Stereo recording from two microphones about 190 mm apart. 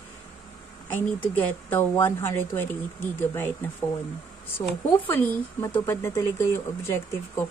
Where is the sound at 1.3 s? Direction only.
10° left (ahead or behind).